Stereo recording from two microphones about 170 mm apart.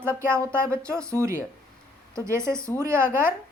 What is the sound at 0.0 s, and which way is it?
A woman's voice, 15° right (ahead or behind).